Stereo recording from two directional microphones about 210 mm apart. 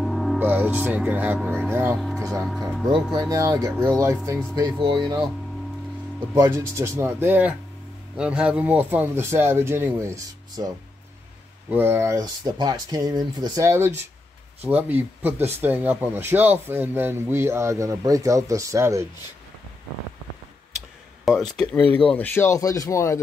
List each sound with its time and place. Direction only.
0.0 s speech: centre (ahead or behind)
11.7 s speech: 10° right (ahead or behind)
21.3 s speech: centre (ahead or behind)